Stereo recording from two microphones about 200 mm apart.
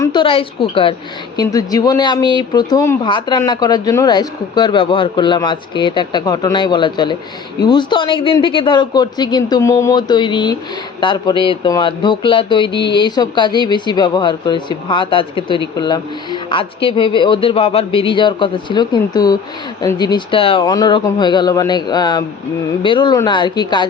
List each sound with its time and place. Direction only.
0.0 s a woman's voice: 20° left (ahead or behind)